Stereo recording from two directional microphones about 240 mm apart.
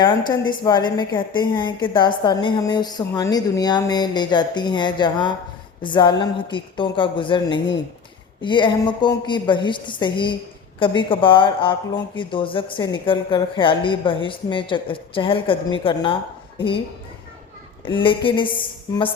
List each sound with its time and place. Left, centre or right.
0.0 s a woman's voice: centre
17.8 s a woman's voice: left